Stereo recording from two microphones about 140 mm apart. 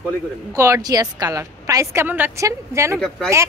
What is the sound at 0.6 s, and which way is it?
A woman's voice, 25° right (ahead or behind).